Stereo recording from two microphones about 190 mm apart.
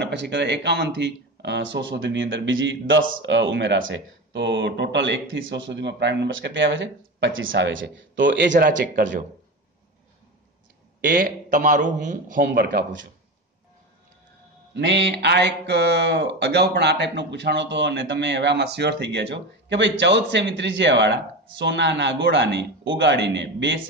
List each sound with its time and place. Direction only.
0.0 s speech: 65° right (ahead or behind)
8.6 s a man's voice: 45° right (ahead or behind)
11.0 s a man's voice: 45° right (ahead or behind)
14.7 s speech: 70° right (ahead or behind)